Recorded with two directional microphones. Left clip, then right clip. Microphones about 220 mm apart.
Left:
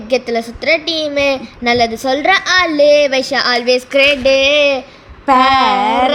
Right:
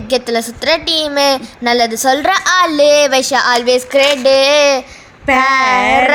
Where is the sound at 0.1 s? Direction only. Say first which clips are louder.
Right 1 dB; 15° right (ahead or behind).